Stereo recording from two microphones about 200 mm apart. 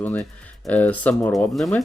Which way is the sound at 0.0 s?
10° left (ahead or behind).